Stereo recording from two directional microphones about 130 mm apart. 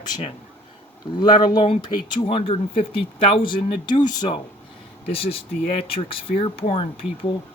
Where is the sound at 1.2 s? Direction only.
35° left (ahead or behind).